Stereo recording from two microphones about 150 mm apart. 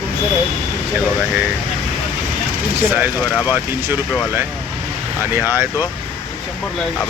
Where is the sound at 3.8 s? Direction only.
15° right (ahead or behind).